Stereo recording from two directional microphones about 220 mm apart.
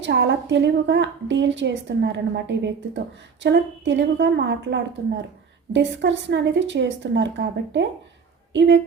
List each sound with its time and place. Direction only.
0.0 s a woman's voice: 55° right (ahead or behind)